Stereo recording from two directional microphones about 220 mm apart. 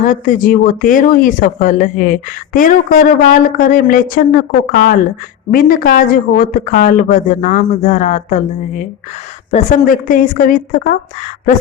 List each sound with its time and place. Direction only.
0.0 s speech: 40° left (ahead or behind)